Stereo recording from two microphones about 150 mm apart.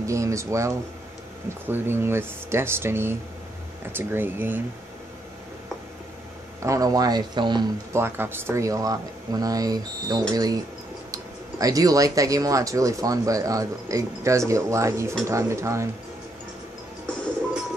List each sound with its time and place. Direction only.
0.0 s speech: 20° right (ahead or behind)
6.6 s speech: 20° right (ahead or behind)
7.9 s speech: 15° right (ahead or behind)